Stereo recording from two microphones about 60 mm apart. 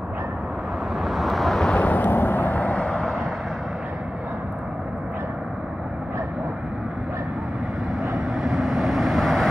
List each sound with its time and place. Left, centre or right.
1.0 s vehicle: centre
1.7 s a sound: left
8.4 s vehicle: centre